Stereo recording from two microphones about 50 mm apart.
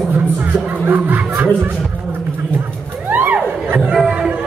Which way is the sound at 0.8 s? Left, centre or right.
Right.